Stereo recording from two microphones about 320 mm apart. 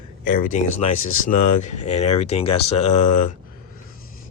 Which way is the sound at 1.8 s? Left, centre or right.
Centre.